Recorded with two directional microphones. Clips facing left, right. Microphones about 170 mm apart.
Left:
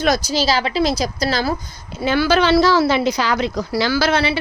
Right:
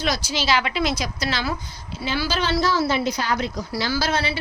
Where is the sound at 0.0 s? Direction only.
45° left (ahead or behind).